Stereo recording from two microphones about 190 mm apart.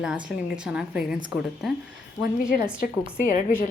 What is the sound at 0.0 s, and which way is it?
A woman's voice, 5° right (ahead or behind).